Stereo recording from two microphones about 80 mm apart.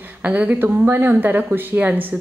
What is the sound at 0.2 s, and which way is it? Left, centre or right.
A woman's voice, centre.